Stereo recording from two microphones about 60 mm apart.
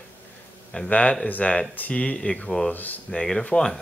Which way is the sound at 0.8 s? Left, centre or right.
Left.